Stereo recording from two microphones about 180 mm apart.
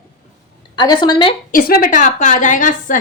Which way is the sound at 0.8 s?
25° left (ahead or behind).